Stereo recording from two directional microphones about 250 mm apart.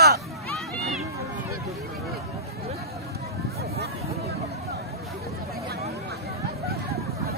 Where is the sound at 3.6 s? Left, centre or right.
Right.